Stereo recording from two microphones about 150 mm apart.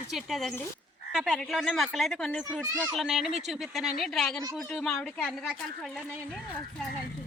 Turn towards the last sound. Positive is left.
turn(degrees=0)  # may be behind; listen again after turning